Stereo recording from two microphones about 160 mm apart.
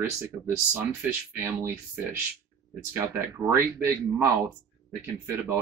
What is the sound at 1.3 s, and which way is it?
Speech, 15° right (ahead or behind).